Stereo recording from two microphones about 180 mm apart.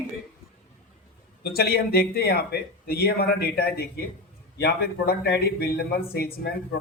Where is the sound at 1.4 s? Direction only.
60° left (ahead or behind).